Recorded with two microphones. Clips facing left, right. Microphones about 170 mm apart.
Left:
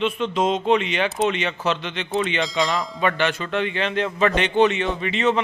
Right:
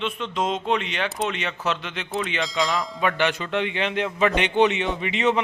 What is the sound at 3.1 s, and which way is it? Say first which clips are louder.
A man's voice: left 1 dB; 15° right (ahead or behind).